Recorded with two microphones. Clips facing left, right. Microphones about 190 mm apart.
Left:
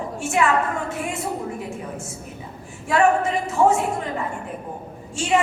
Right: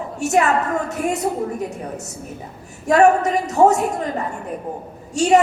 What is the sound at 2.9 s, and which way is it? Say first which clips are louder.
A woman's voice: right 5 dB; 40° right (ahead or behind).